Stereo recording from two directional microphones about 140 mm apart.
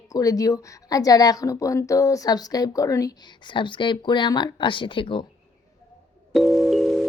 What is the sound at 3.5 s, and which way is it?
Speech, 35° left (ahead or behind).